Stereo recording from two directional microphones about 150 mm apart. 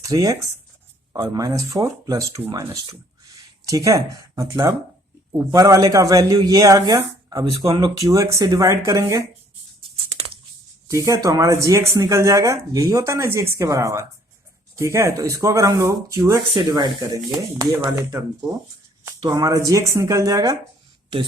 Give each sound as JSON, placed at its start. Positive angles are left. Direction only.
{"t": 0.0, "sound": "speech", "side_deg": -20}
{"t": 10.1, "sound": "a sound", "side_deg": -40}
{"t": 10.8, "sound": "speech", "side_deg": -20}
{"t": 16.6, "sound": "speech", "side_deg": -30}